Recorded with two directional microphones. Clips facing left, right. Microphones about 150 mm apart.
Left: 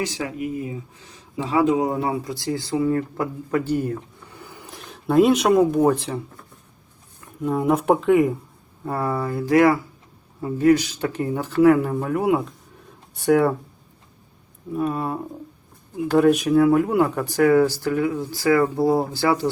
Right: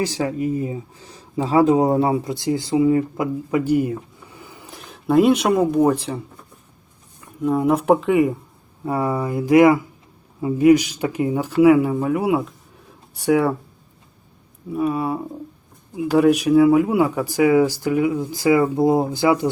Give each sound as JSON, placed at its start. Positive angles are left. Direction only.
{"t": 0.0, "sound": "speech", "side_deg": -35}
{"t": 14.7, "sound": "speech", "side_deg": -5}